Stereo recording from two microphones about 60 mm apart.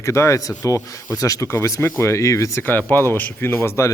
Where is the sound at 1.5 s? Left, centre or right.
Left.